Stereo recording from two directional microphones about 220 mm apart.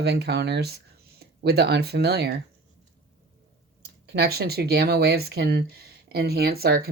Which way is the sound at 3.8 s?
45° right (ahead or behind).